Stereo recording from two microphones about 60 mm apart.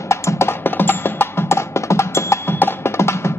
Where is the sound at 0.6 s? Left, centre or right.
Left.